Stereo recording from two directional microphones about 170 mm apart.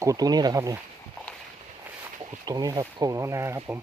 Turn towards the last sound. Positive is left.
turn(degrees=-15)  # may be behind; listen again after turning